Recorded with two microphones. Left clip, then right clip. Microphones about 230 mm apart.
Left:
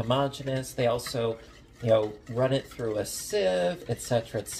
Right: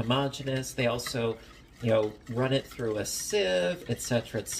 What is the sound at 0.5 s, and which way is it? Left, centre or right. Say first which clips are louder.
Speech: left 2 dB; centre.